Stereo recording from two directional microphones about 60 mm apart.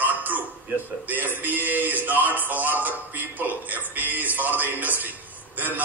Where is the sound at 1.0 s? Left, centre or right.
Right.